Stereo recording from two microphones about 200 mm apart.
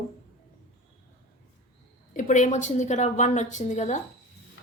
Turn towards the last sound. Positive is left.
turn(degrees=35)  # may be behind; listen again after turning